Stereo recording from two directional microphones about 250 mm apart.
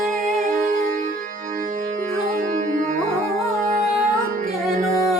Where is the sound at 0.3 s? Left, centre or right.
Right.